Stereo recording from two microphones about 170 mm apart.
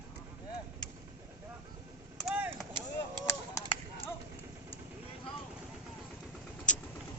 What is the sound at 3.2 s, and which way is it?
Honk, 20° left (ahead or behind).